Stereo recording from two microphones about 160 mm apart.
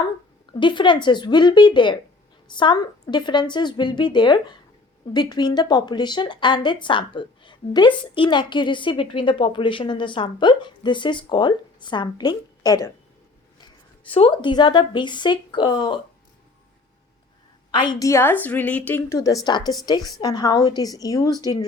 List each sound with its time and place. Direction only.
0.6 s speech: 30° left (ahead or behind)
14.0 s speech: 35° left (ahead or behind)
17.7 s a woman's voice: 30° left (ahead or behind)